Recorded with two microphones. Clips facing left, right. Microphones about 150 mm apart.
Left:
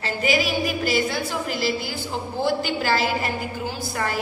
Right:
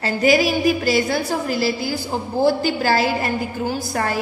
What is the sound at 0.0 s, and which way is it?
A woman's voice, 40° right (ahead or behind).